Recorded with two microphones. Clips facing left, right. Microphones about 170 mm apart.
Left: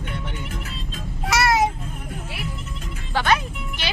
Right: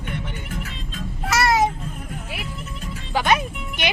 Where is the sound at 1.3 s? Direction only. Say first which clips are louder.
Even; 5° left (ahead or behind).